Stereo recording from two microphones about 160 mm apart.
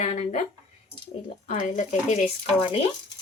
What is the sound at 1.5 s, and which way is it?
Speech, 50° left (ahead or behind).